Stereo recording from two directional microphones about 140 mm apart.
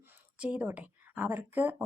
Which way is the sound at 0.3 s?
10° right (ahead or behind).